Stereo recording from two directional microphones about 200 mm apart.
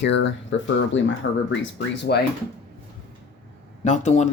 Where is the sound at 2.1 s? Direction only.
50° left (ahead or behind).